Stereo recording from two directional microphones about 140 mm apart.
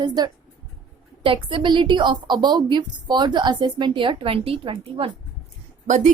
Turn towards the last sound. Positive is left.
turn(degrees=-65)  # may be behind; listen again after turning